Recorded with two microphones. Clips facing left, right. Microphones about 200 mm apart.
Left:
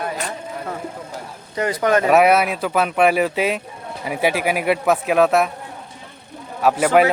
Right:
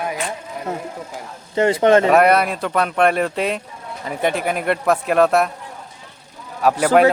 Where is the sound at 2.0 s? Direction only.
5° left (ahead or behind).